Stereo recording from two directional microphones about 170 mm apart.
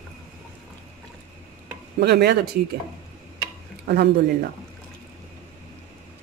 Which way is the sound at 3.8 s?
65° right (ahead or behind).